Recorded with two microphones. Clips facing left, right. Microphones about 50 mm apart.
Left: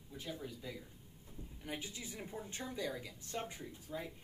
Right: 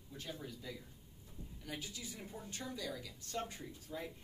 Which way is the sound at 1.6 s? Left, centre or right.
Left.